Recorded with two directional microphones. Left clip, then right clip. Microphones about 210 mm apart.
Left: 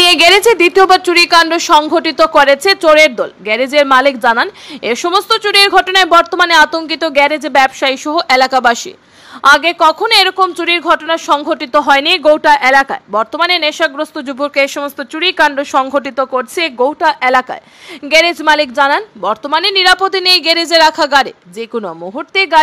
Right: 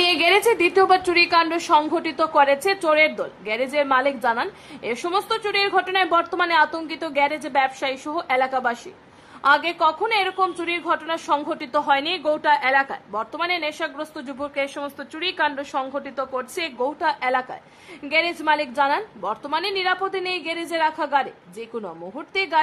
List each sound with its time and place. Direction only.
0.0 s a woman's voice: 20° left (ahead or behind)